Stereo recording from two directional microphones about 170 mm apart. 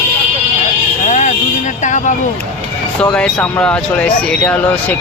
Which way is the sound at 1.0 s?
45° left (ahead or behind).